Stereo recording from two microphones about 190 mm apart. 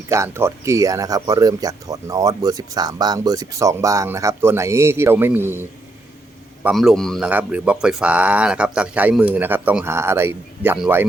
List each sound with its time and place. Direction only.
0.1 s a man's voice: 15° right (ahead or behind); by 7.3 s 5° left (ahead or behind)
7.3 s speech: 10° right (ahead or behind)